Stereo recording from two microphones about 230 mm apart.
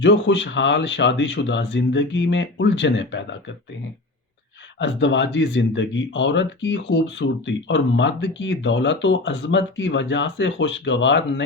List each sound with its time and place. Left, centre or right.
0.0 s speech: left
4.8 s speech: left